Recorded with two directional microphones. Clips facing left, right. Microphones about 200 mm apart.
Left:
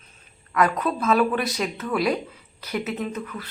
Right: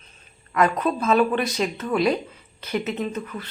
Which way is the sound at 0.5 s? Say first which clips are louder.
Right 1 dB; centre (ahead or behind).